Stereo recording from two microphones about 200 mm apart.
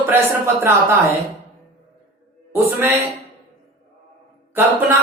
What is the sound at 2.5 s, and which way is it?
Speech, 15° right (ahead or behind).